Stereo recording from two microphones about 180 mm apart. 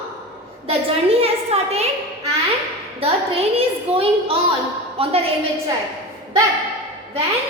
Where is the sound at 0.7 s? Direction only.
35° right (ahead or behind).